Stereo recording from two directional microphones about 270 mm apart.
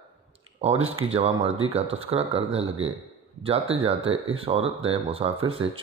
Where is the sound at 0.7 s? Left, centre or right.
Right.